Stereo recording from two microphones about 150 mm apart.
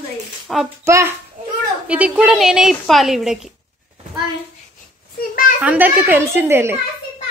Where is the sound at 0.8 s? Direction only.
20° right (ahead or behind).